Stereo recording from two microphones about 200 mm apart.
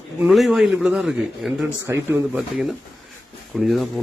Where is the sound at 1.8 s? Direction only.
10° right (ahead or behind).